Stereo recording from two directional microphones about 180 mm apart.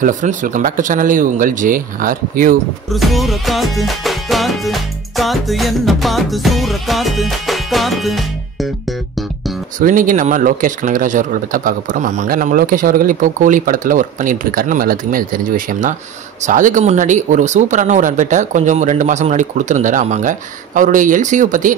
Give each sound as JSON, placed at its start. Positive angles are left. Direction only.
{"t": 0.0, "sound": "speech", "side_deg": -45}
{"t": 2.9, "sound": "music", "side_deg": 0}
{"t": 9.8, "sound": "speech", "side_deg": -50}